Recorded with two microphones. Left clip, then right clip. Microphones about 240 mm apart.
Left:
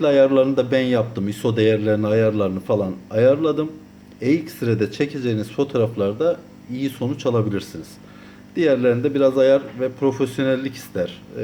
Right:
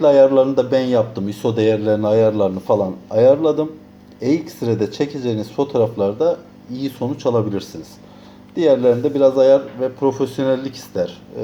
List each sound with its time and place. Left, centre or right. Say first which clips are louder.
0.0 s speech: right 4 dB; centre